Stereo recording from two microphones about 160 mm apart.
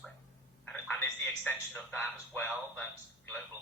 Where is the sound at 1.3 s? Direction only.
10° left (ahead or behind).